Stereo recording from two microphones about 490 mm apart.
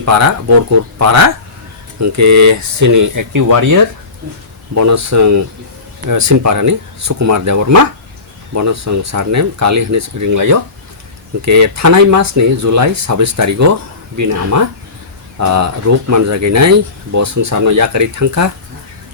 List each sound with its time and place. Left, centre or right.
0.0 s speech: right